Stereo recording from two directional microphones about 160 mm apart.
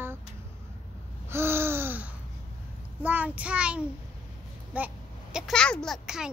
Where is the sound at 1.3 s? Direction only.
15° right (ahead or behind).